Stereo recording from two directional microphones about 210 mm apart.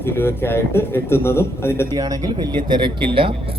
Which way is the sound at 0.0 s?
10° left (ahead or behind).